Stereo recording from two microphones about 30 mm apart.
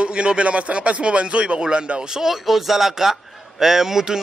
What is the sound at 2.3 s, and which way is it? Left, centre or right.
A man's voice, centre.